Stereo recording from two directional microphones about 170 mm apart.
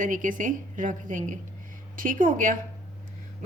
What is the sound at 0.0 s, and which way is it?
Speech, 50° right (ahead or behind).